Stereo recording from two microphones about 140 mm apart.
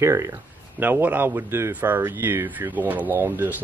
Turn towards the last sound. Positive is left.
turn(degrees=-15)  # may be behind; listen again after turning